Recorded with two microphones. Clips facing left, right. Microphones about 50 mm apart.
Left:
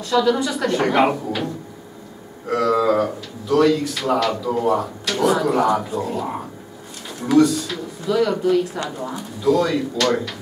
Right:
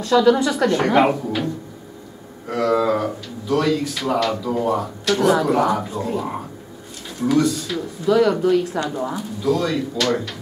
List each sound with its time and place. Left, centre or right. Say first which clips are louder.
0.1 s a woman's voice: right 3 dB; centre